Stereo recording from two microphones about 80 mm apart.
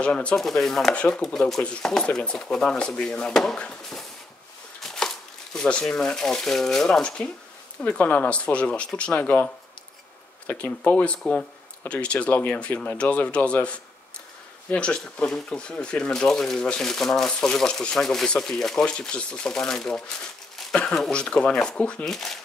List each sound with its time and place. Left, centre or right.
0.0 s speech: centre
0.4 s speech: centre